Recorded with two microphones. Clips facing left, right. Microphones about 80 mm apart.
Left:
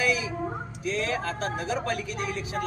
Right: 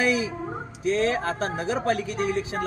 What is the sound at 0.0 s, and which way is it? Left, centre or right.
Music, right.